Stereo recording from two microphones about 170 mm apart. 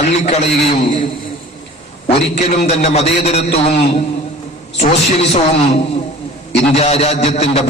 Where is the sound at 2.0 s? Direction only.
40° left (ahead or behind).